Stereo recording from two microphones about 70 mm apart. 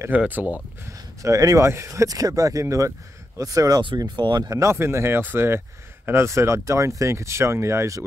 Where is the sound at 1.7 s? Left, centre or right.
Right.